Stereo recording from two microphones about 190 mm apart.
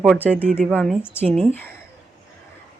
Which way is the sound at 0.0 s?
5° right (ahead or behind).